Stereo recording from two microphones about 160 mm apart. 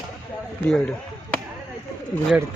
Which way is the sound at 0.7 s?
5° left (ahead or behind).